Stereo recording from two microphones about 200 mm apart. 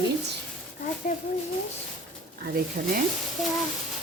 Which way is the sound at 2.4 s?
45° right (ahead or behind).